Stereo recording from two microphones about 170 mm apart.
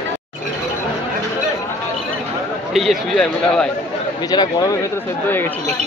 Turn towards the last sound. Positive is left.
turn(degrees=25)  # may be behind; listen again after turning